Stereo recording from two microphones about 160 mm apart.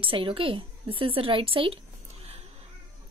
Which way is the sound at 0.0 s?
35° right (ahead or behind).